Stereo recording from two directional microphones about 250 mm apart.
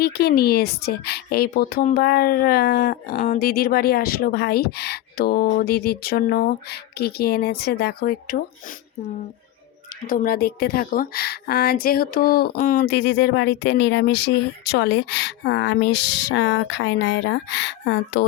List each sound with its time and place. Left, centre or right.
0.0 s a woman's voice: left
10.1 s a woman's voice: left